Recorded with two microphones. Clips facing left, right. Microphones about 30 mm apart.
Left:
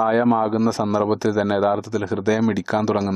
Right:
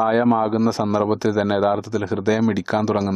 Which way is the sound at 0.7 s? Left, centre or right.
Centre.